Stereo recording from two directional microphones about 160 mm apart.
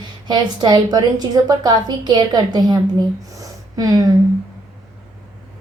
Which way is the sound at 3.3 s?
20° right (ahead or behind).